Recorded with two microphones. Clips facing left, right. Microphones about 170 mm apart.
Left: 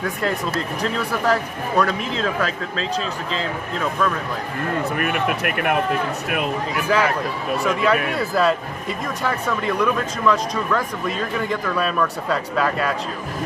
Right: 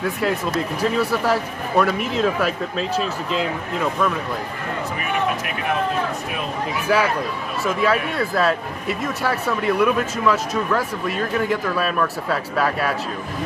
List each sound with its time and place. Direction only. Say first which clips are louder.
0.0 s speech: right 2 dB; 5° right (ahead or behind)
4.9 s speech: left 1 dB; 60° left (ahead or behind)
6.9 s speech: right 1 dB; 5° right (ahead or behind)